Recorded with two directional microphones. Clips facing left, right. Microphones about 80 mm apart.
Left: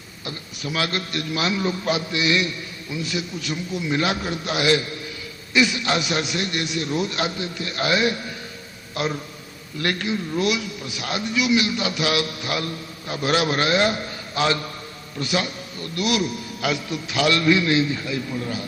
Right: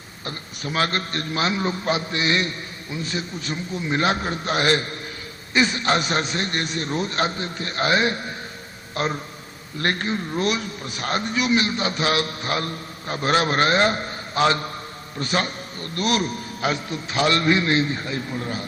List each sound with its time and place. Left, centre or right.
0.3 s a man's voice: right